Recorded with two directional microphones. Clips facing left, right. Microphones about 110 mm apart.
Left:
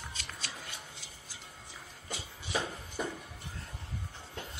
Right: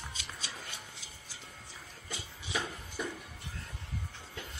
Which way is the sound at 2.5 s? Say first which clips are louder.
Left 2 dB; 35° left (ahead or behind).